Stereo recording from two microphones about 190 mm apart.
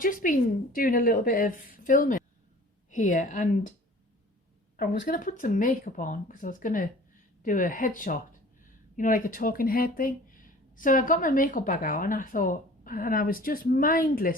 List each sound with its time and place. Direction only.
0.0 s speech: 45° left (ahead or behind)
4.8 s speech: 45° left (ahead or behind)